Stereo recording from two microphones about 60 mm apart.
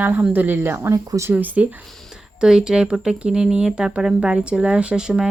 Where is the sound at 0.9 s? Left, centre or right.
Right.